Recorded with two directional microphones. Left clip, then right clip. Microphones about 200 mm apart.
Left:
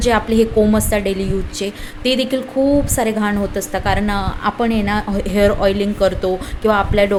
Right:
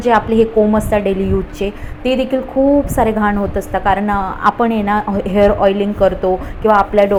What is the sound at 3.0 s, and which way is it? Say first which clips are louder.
A woman's voice: right 4 dB; 5° left (ahead or behind).